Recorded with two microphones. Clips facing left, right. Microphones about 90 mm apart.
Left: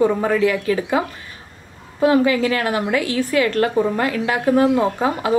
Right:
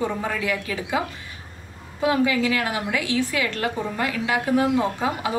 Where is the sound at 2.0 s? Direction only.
45° left (ahead or behind).